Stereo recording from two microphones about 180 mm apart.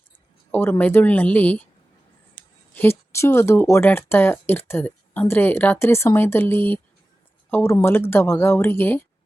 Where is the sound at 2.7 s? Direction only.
15° left (ahead or behind).